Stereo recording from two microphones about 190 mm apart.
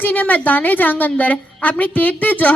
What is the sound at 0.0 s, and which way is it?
A woman's voice, 10° left (ahead or behind).